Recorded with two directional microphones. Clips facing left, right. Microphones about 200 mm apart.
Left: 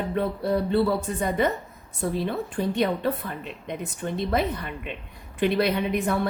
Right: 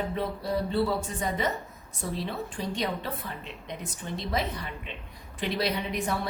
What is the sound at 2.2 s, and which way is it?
A woman's voice, 55° left (ahead or behind).